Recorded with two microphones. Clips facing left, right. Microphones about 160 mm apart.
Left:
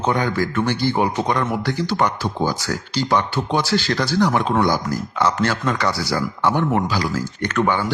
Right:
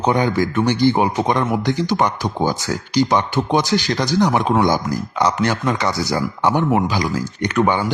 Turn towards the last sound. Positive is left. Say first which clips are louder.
# right 2 dB
turn(degrees=-15)  # may be behind; listen again after turning